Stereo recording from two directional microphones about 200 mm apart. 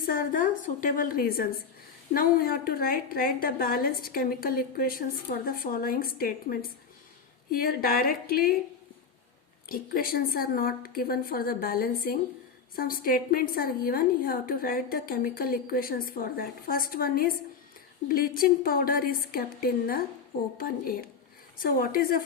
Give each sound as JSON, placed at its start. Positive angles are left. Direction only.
{"t": 0.1, "sound": "a woman's voice", "side_deg": 45}
{"t": 9.6, "sound": "a woman's voice", "side_deg": 45}
{"t": 20.6, "sound": "a woman's voice", "side_deg": 45}